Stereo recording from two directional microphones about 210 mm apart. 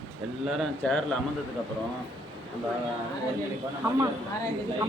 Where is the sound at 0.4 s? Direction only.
Centre (ahead or behind).